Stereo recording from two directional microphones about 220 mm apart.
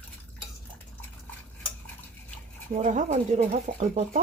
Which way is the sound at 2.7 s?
35° right (ahead or behind).